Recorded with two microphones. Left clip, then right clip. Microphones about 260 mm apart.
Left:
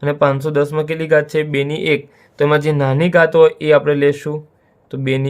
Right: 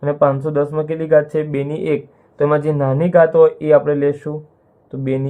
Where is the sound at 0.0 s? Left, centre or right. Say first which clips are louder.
Even; left.